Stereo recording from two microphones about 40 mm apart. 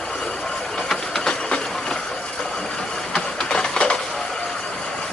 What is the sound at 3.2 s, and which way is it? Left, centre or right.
Printer, centre.